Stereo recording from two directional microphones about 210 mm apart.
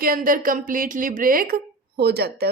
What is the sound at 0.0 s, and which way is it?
A man's voice, 40° right (ahead or behind).